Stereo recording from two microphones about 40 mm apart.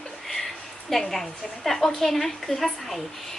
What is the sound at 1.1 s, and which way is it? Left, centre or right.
A woman's voice, centre.